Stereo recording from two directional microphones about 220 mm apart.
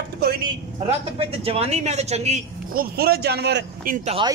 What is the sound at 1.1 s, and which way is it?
A man's voice, 25° right (ahead or behind).